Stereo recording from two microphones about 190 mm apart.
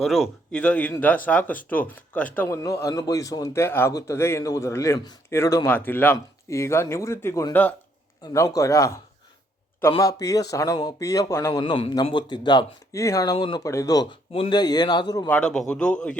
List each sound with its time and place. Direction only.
0.0 s a man's voice: centre (ahead or behind); by 11.6 s 15° left (ahead or behind)
11.6 s speech: 25° left (ahead or behind)
15.3 s a man's voice: 5° left (ahead or behind)